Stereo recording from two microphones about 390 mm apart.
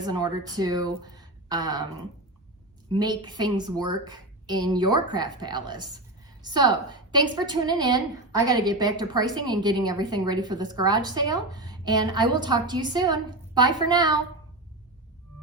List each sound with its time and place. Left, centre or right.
0.0 s speech: centre
3.0 s a woman's voice: centre